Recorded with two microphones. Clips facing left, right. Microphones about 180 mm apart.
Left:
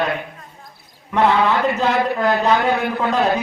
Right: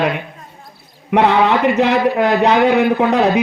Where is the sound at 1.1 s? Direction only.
70° right (ahead or behind).